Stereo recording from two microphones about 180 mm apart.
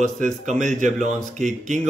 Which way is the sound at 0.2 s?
40° right (ahead or behind).